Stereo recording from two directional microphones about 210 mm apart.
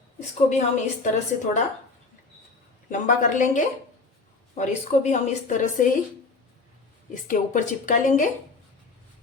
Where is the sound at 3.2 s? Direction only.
35° left (ahead or behind).